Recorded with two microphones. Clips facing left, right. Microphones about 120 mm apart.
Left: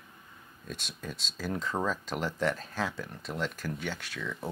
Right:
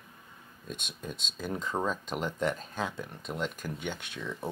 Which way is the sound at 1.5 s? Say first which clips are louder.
Even; 10° right (ahead or behind).